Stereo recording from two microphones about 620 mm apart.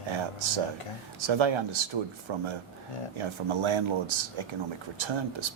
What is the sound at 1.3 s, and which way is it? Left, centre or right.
Speech, right.